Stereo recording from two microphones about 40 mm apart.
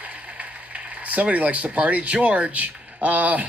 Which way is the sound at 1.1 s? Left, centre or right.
Right.